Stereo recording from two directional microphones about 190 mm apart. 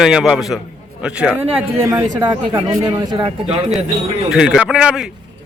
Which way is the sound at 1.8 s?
20° right (ahead or behind).